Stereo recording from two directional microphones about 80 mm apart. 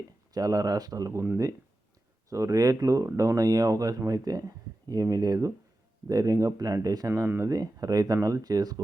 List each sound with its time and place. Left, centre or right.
0.3 s speech: right
2.3 s speech: right
7.1 s speech: right
7.5 s speech: right